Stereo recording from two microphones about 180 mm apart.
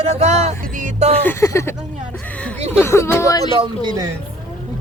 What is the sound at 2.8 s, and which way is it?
Speech, 15° left (ahead or behind).